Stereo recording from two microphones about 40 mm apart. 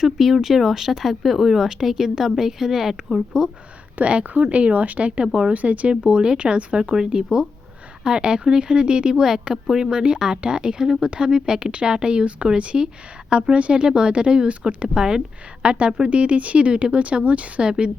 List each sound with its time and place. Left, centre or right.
0.0 s speech: centre
3.9 s speech: right
6.9 s speech: centre
15.6 s speech: right